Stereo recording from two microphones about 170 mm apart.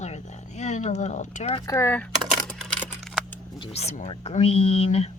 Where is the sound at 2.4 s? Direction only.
Centre (ahead or behind).